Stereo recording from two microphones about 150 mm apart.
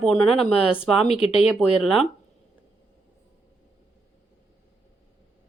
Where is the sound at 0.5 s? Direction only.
40° left (ahead or behind).